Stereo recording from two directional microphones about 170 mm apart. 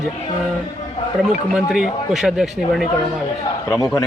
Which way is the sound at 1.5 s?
5° right (ahead or behind).